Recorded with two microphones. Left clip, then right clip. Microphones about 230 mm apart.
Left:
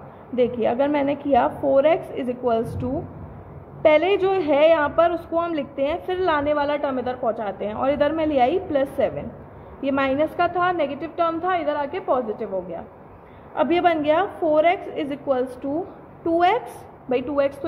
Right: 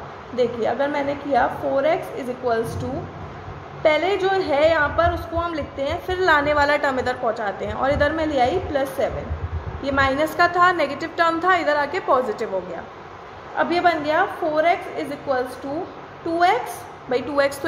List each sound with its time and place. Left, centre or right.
0.4 s a woman's voice: left
3.8 s a woman's voice: left
13.6 s a woman's voice: left
17.1 s a woman's voice: left